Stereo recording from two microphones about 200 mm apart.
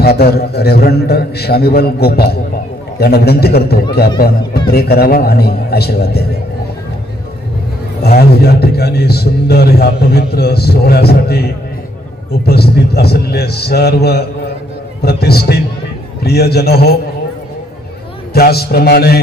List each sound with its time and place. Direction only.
0.0 s a man's voice: 50° left (ahead or behind)
8.0 s a man's voice: 50° left (ahead or behind)
18.3 s a man's voice: 50° left (ahead or behind)